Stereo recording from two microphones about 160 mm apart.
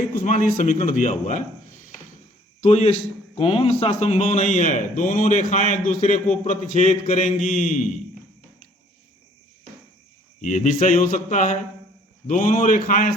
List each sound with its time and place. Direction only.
0.2 s a man's voice: 55° left (ahead or behind)
2.6 s a man's voice: 45° left (ahead or behind)
10.4 s a man's voice: 50° left (ahead or behind)